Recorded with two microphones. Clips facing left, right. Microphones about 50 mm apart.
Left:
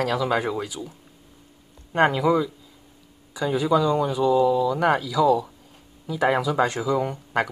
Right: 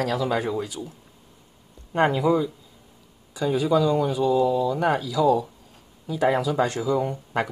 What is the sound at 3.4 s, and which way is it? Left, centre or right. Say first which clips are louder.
Speech: even; centre.